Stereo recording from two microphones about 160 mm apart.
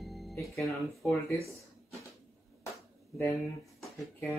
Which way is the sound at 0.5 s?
20° left (ahead or behind).